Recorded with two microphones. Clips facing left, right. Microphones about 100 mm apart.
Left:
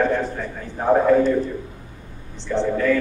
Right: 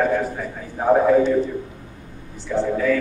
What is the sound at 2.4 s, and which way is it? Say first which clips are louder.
Speech: even; 5° right (ahead or behind).